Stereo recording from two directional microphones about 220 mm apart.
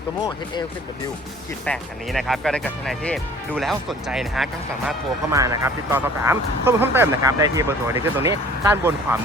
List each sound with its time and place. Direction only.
0.2 s speech: 20° left (ahead or behind)
1.6 s speech: centre (ahead or behind)
5.3 s speech: 15° right (ahead or behind)